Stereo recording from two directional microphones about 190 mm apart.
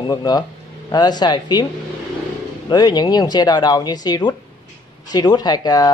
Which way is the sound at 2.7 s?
20° left (ahead or behind).